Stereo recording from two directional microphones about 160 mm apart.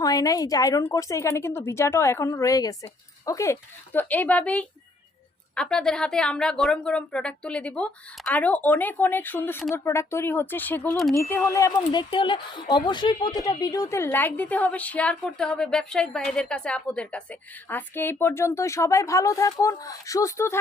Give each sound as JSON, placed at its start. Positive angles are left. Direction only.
{"t": 0.0, "sound": "speech", "side_deg": 20}